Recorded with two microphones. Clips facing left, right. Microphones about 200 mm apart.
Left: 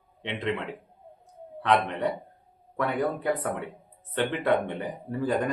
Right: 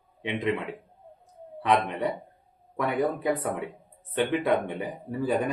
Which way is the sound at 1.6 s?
10° right (ahead or behind).